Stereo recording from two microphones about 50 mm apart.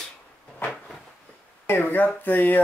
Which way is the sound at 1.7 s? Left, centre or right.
Left.